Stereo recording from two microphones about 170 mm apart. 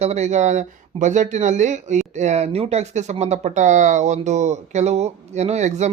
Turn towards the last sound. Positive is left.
turn(degrees=-45)  # may be behind; listen again after turning